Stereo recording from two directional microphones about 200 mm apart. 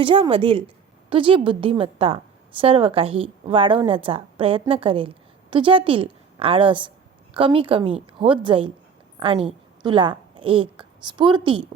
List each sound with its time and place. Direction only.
0.0 s a woman's voice: 25° right (ahead or behind)